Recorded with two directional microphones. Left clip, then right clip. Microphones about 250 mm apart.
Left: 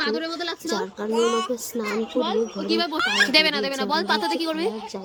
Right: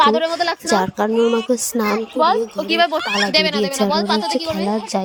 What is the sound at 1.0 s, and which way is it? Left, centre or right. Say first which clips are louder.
Speech: right 6 dB; right.